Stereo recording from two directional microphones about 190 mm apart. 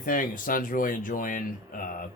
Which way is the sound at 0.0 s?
45° left (ahead or behind).